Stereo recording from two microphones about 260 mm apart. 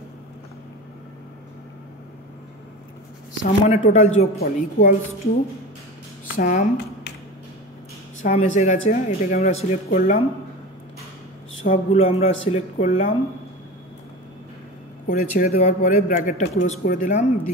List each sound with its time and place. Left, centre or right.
3.4 s speech: left
6.3 s speech: left
8.2 s speech: left
11.6 s speech: left
15.0 s a man's voice: left